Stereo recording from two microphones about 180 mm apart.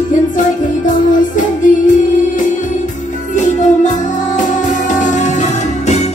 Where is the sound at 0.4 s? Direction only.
45° left (ahead or behind).